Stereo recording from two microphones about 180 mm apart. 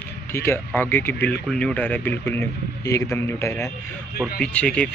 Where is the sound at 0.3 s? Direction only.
15° left (ahead or behind).